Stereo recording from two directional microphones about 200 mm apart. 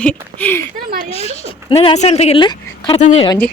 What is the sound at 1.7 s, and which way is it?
Speech, 25° left (ahead or behind).